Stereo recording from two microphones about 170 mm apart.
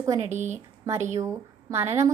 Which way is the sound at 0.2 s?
45° right (ahead or behind).